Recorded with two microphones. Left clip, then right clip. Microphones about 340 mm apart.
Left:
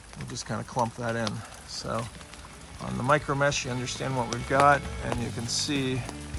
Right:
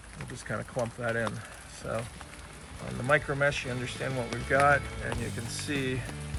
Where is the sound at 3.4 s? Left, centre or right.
Centre.